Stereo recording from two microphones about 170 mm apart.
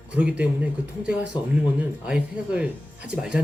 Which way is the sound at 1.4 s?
25° left (ahead or behind).